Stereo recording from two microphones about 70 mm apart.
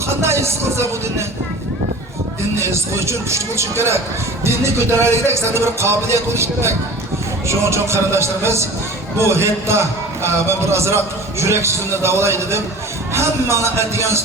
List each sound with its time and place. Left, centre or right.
0.2 s a man's voice: right
2.6 s a man's voice: right